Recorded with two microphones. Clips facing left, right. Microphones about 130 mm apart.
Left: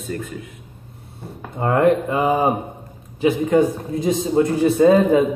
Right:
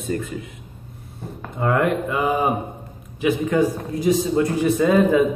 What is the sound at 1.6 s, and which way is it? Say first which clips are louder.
A man's voice: left 4 dB; 30° left (ahead or behind).